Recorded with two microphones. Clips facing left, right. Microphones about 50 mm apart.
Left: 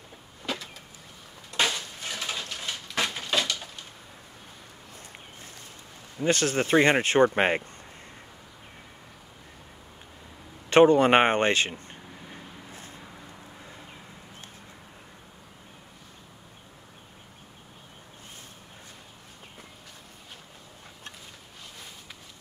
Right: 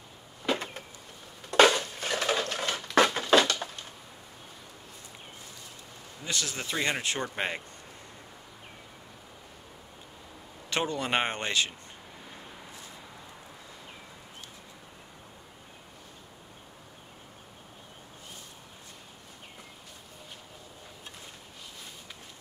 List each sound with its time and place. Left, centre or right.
0.4 s power windows: centre
1.7 s crushing: right
2.2 s a sound: right
6.2 s speech: left
10.7 s speech: left